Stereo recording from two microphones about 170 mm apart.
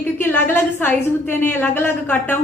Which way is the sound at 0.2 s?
10° left (ahead or behind).